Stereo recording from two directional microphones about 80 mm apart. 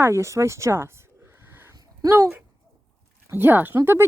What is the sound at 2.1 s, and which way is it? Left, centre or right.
Speech, right.